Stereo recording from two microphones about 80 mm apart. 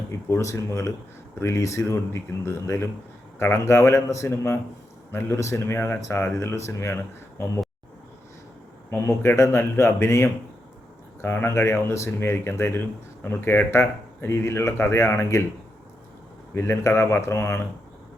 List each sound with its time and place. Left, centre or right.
0.1 s speech: left
8.9 s speech: left
16.6 s speech: left